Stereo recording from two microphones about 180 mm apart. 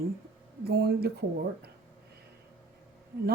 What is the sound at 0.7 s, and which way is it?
Speech, 60° right (ahead or behind).